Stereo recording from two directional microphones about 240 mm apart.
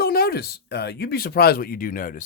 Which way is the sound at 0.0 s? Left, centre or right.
Left.